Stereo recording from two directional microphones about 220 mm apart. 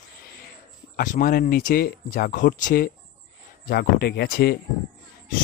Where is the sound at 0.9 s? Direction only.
40° left (ahead or behind).